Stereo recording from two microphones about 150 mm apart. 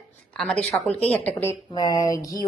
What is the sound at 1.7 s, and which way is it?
Speech, 25° left (ahead or behind).